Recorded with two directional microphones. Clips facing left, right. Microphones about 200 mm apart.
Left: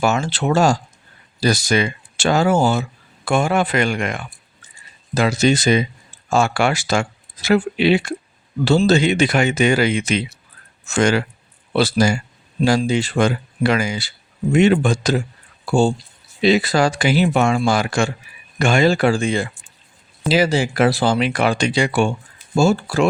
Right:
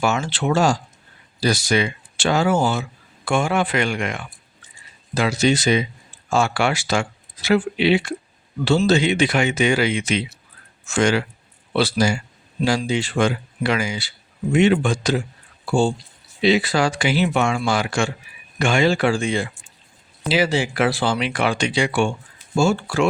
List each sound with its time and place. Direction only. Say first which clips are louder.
0.0 s speech: left 2 dB; 40° left (ahead or behind)
16.4 s speech: left 2 dB; 45° left (ahead or behind)